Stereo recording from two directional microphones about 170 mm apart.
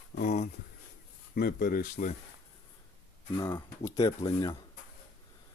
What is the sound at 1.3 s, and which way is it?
Speech, 60° left (ahead or behind).